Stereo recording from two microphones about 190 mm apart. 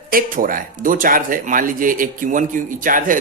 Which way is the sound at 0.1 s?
50° right (ahead or behind).